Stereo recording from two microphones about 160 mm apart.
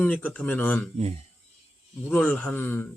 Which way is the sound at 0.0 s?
10° left (ahead or behind).